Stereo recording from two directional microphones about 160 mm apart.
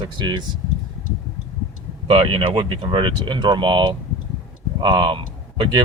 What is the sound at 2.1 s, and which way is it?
Speech, 35° right (ahead or behind).